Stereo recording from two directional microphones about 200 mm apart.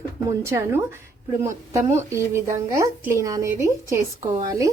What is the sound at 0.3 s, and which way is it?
A woman's voice, 15° right (ahead or behind).